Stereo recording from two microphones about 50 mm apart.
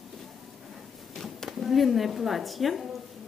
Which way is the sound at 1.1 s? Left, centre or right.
Centre.